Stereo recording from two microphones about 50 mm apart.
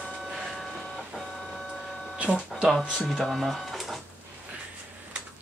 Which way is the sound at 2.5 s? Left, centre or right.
Centre.